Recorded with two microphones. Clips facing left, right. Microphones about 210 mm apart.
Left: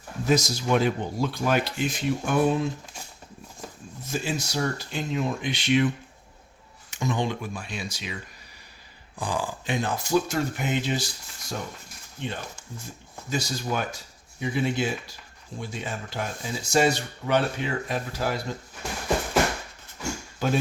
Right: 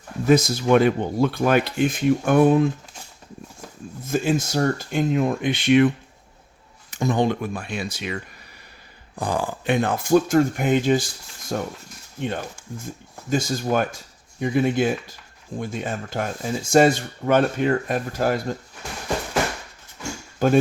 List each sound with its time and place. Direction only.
0.3 s speech: 55° right (ahead or behind)
4.0 s speech: 55° right (ahead or behind)
6.9 s speech: 45° right (ahead or behind); by 8.1 s 60° right (ahead or behind)
9.1 s speech: 55° right (ahead or behind)
13.3 s speech: 50° right (ahead or behind)
20.4 s speech: 50° right (ahead or behind)